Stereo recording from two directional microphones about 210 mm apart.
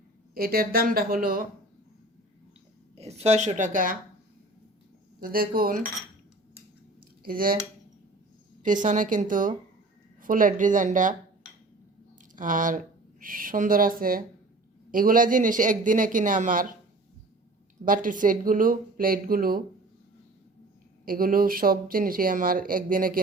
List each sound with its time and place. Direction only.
0.3 s speech: 45° right (ahead or behind)
2.9 s a man's voice: 30° right (ahead or behind)
5.2 s speech: 45° right (ahead or behind)
7.2 s speech: 45° right (ahead or behind)
8.6 s a man's voice: 35° right (ahead or behind)
12.4 s a man's voice: 40° right (ahead or behind)
17.8 s a man's voice: 40° right (ahead or behind)
21.0 s speech: 45° right (ahead or behind)